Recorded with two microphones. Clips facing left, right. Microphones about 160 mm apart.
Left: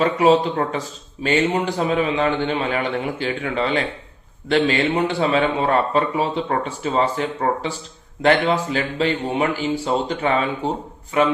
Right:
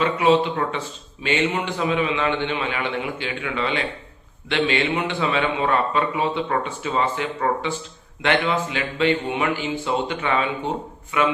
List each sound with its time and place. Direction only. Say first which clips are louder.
0.0 s speech: left 2 dB; 40° left (ahead or behind)